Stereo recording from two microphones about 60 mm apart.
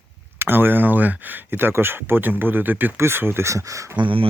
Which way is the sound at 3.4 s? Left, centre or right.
Right.